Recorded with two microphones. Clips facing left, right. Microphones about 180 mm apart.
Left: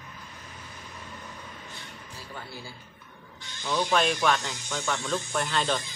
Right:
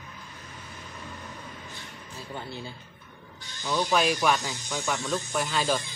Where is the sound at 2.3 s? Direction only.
25° right (ahead or behind).